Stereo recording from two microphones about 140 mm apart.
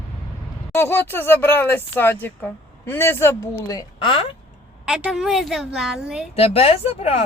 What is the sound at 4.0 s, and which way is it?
Speech, 40° left (ahead or behind).